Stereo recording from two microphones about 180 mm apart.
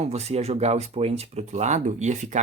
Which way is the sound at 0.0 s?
35° right (ahead or behind).